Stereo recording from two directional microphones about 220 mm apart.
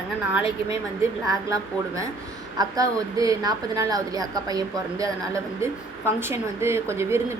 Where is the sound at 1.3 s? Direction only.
15° right (ahead or behind).